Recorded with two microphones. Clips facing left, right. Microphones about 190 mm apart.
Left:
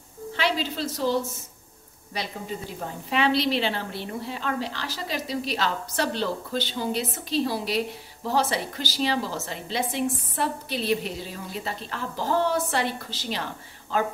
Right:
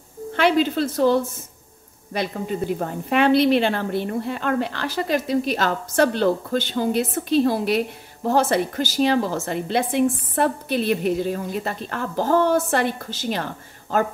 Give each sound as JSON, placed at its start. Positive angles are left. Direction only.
{"t": 0.3, "sound": "a woman's voice", "side_deg": -55}